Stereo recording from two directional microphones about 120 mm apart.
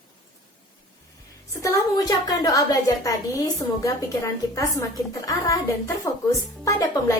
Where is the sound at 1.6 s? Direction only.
30° left (ahead or behind).